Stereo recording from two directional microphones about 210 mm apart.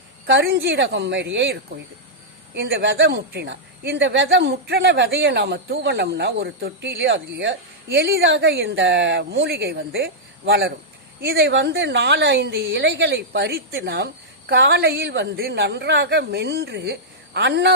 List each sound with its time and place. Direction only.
0.3 s speech: 55° right (ahead or behind)
2.6 s a woman's voice: 60° right (ahead or behind)